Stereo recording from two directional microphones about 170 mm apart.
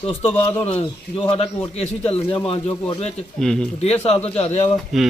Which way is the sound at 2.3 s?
25° left (ahead or behind).